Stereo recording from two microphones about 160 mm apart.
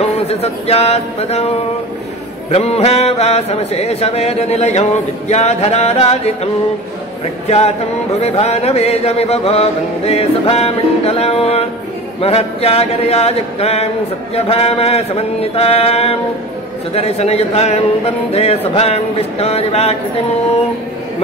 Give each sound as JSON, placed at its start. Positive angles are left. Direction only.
{"t": 0.3, "sound": "speech", "side_deg": 40}
{"t": 2.5, "sound": "speech", "side_deg": 40}
{"t": 7.4, "sound": "a sound", "side_deg": 40}
{"t": 8.2, "sound": "speech", "side_deg": 40}